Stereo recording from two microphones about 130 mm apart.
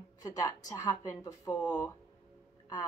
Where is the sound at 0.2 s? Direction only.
25° left (ahead or behind).